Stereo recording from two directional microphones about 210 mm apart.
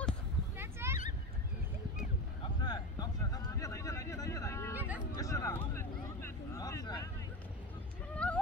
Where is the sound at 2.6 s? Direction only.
20° left (ahead or behind).